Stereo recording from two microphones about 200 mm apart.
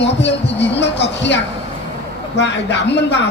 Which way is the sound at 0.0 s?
60° left (ahead or behind).